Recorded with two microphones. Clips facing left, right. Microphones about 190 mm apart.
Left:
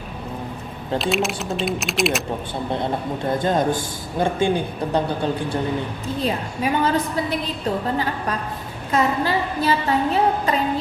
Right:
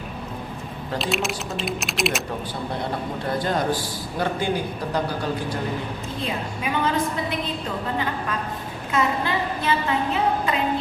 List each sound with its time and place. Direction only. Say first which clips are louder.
0.9 s speech: left 4 dB; centre (ahead or behind)
3.4 s a man's voice: left 4 dB; 20° left (ahead or behind)
8.9 s a sound: left 3 dB; 35° left (ahead or behind)